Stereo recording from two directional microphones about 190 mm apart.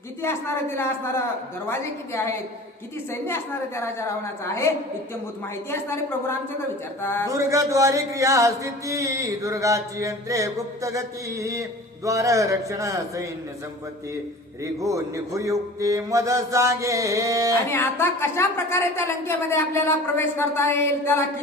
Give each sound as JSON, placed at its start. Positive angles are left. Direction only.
{"t": 0.2, "sound": "a woman's voice", "side_deg": 15}
{"t": 5.9, "sound": "a woman's voice", "side_deg": 10}
{"t": 7.3, "sound": "chant", "side_deg": -15}
{"t": 14.6, "sound": "chant", "side_deg": -15}
{"t": 17.7, "sound": "a woman's voice", "side_deg": 15}